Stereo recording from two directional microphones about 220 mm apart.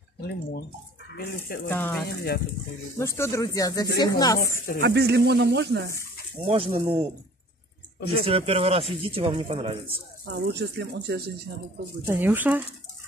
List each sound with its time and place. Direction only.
0.2 s speech: 45° left (ahead or behind)
1.7 s speech: 10° left (ahead or behind)
4.8 s speech: 50° right (ahead or behind)
6.4 s speech: 25° right (ahead or behind)
8.1 s speech: 25° right (ahead or behind)
10.2 s speech: 50° right (ahead or behind)
12.1 s speech: 10° right (ahead or behind)